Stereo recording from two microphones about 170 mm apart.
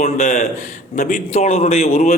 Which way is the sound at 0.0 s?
40° left (ahead or behind).